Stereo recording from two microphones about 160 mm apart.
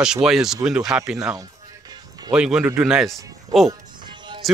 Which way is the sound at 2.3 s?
5° right (ahead or behind).